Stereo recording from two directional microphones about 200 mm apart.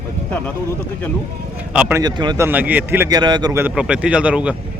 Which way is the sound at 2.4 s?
10° right (ahead or behind).